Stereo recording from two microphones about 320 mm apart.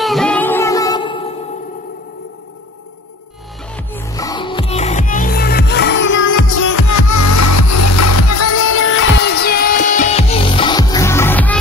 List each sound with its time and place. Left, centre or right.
0.0 s music: centre
3.7 s music: centre; by 6.3 s left
6.3 s music: left; by 11.5 s centre